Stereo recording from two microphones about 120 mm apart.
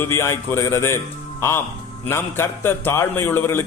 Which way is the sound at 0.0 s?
20° left (ahead or behind).